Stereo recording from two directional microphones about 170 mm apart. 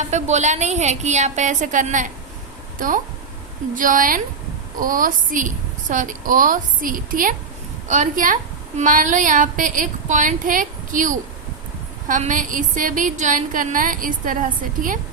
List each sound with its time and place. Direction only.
0.0 s a woman's voice: 45° right (ahead or behind)